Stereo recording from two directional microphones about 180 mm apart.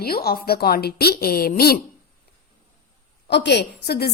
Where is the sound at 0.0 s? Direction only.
60° left (ahead or behind).